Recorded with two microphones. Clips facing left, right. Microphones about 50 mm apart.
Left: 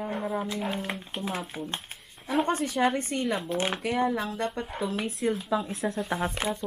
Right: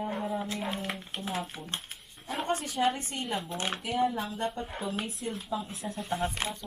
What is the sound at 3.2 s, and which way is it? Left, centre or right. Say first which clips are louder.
Speech: left 5 dB; left.